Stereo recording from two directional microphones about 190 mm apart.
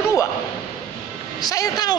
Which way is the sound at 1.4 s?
20° left (ahead or behind).